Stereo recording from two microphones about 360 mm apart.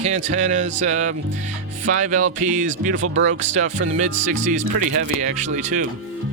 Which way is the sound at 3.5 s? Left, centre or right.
Centre.